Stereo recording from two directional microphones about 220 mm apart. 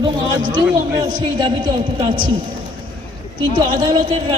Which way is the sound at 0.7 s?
20° right (ahead or behind).